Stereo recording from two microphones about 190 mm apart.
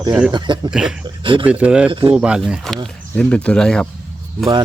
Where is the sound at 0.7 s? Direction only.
5° right (ahead or behind).